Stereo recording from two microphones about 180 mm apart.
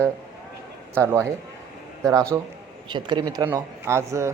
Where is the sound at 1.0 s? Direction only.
15° right (ahead or behind).